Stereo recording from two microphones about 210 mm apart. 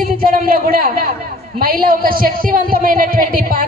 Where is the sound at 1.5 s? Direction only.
45° right (ahead or behind).